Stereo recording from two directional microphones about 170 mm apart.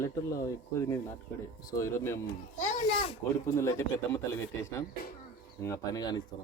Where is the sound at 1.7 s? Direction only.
15° left (ahead or behind).